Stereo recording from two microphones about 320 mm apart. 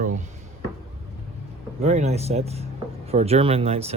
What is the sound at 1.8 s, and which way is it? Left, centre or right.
Speech, centre.